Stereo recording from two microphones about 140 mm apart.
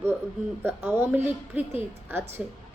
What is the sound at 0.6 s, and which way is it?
A woman's voice, 15° right (ahead or behind).